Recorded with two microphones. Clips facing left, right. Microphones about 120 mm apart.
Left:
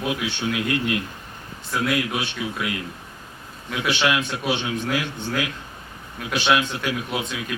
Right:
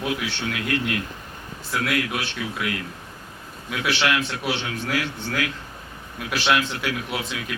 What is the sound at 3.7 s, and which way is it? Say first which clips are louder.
Speech: left 1 dB; 5° right (ahead or behind).